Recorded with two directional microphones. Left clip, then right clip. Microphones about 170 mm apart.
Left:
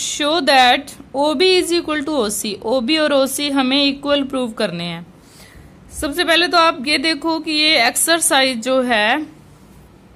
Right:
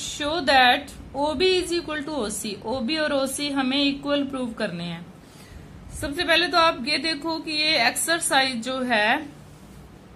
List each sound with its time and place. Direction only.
0.0 s speech: 45° left (ahead or behind)